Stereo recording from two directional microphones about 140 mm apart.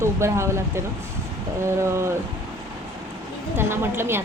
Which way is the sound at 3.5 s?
15° right (ahead or behind).